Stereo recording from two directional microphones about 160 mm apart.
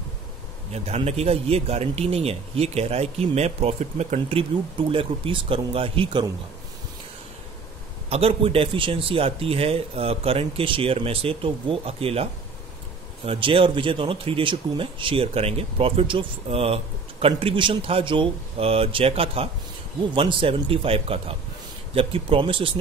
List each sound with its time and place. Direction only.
0.7 s speech: 40° right (ahead or behind)
8.1 s speech: 35° right (ahead or behind)